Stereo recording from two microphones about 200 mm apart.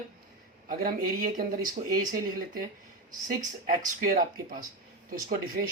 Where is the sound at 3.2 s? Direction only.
45° right (ahead or behind).